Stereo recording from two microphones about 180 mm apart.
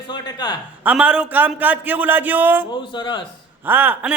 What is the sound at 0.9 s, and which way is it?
A man's voice, 5° right (ahead or behind).